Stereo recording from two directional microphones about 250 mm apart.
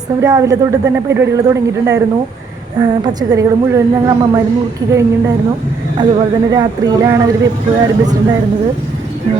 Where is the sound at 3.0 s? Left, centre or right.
Centre.